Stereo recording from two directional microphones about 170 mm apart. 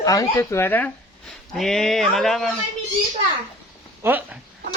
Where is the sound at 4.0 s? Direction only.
10° right (ahead or behind).